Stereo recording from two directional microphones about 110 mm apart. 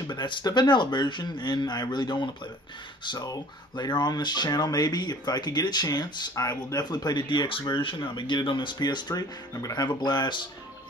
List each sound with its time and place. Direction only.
0.1 s speech: 45° left (ahead or behind)